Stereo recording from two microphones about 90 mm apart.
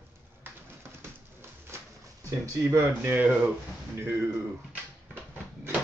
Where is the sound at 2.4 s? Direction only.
35° right (ahead or behind).